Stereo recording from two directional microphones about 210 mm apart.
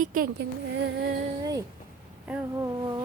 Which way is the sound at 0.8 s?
55° right (ahead or behind).